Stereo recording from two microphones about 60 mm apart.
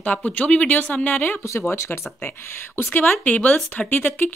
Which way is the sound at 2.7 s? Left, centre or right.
Left.